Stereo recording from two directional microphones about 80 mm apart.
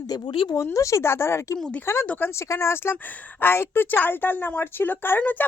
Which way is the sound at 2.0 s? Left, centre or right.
Left.